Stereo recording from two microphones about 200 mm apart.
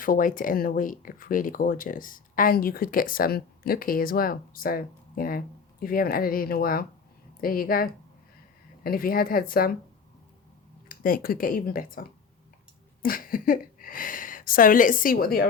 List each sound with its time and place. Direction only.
0.0 s speech: 45° left (ahead or behind)
10.8 s speech: 45° left (ahead or behind)